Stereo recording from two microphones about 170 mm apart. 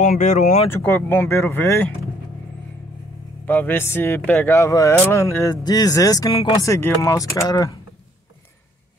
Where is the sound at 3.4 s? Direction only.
10° left (ahead or behind).